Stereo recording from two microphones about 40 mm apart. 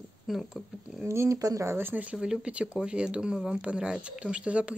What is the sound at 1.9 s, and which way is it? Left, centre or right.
Speech, right.